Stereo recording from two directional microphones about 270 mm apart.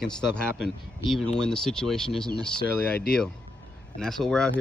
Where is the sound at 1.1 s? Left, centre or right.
Centre.